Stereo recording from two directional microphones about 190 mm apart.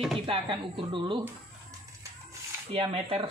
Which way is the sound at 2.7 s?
30° right (ahead or behind).